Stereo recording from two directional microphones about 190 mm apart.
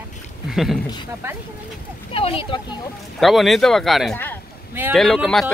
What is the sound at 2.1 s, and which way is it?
Speech, 30° left (ahead or behind).